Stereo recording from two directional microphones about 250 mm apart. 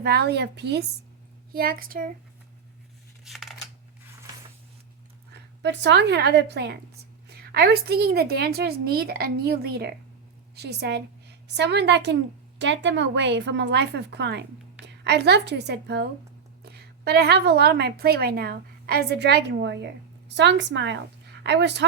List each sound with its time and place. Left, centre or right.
0.0 s a woman's voice: right
3.2 s shuffling cards: centre
5.3 s a woman's voice: right